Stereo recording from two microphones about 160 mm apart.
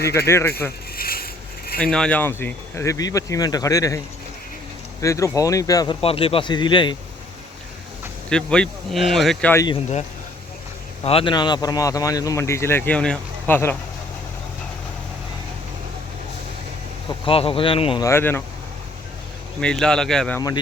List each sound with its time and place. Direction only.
0.1 s speech: 15° left (ahead or behind)
0.9 s a sound: 70° left (ahead or behind)
1.8 s speech: 5° left (ahead or behind); by 6.0 s 25° left (ahead or behind)
6.0 s speech: 35° left (ahead or behind)
8.3 s speech: 5° left (ahead or behind)
11.0 s speech: 35° left (ahead or behind); by 13.7 s 15° left (ahead or behind)
17.2 s speech: 35° left (ahead or behind)
18.0 s speech: 15° left (ahead or behind)
19.6 s speech: 5° left (ahead or behind)